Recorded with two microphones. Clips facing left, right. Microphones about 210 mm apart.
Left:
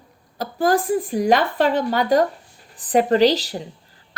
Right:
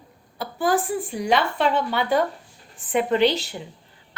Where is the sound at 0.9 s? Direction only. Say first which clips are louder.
Left 5 dB; 40° left (ahead or behind).